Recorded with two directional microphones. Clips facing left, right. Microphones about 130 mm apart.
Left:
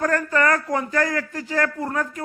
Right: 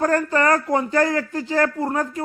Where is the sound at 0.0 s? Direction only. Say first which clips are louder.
Right 2 dB; 30° right (ahead or behind).